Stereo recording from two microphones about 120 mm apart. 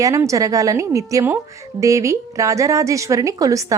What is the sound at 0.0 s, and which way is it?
A woman's voice, 25° right (ahead or behind).